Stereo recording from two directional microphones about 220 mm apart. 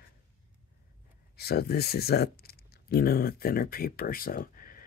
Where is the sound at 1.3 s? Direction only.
45° left (ahead or behind).